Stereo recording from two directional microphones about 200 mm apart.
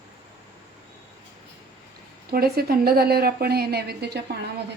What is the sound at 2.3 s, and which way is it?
Speech, 50° right (ahead or behind).